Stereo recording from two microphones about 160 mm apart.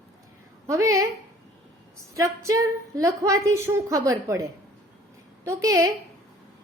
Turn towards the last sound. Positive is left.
turn(degrees=-20)  # may be behind; listen again after turning